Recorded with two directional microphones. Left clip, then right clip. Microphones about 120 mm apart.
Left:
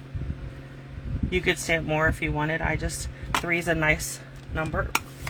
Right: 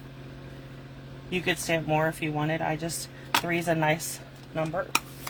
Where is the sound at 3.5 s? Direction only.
60° left (ahead or behind).